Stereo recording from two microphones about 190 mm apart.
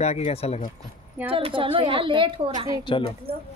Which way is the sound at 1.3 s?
30° right (ahead or behind).